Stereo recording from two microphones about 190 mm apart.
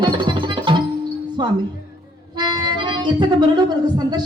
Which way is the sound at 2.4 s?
20° right (ahead or behind).